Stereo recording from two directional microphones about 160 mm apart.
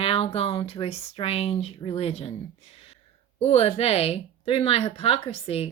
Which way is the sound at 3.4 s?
40° left (ahead or behind).